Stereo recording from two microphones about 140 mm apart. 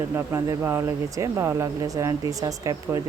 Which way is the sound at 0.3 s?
20° right (ahead or behind).